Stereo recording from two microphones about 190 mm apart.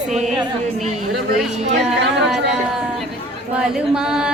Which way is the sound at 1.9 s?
Centre (ahead or behind).